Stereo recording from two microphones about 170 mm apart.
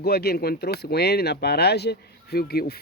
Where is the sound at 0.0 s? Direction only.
65° left (ahead or behind).